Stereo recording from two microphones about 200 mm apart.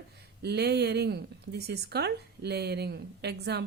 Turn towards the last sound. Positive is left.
turn(degrees=-55)  # may be behind; listen again after turning